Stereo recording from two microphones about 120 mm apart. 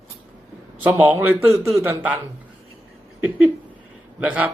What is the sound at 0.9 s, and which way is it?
Speech, 15° right (ahead or behind).